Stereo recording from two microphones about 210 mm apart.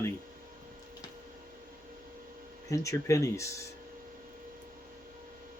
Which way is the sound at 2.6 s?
15° left (ahead or behind).